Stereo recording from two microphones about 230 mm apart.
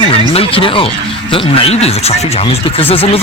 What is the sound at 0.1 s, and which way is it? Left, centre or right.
Speech, left.